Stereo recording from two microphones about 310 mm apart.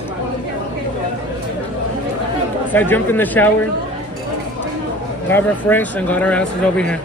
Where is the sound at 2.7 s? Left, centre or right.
Centre.